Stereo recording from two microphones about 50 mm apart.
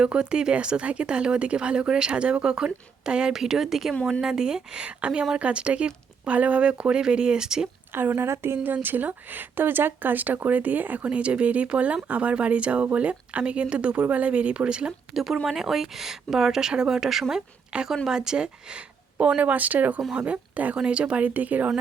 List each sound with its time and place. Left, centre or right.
0.0 s speech: centre
7.9 s a woman's voice: right
8.6 s speech: right; by 14.9 s centre
15.1 s speech: centre; by 19.3 s right
19.4 s speech: right